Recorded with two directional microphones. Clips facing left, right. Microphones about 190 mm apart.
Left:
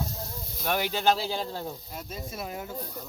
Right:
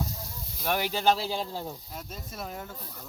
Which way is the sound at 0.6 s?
5° right (ahead or behind).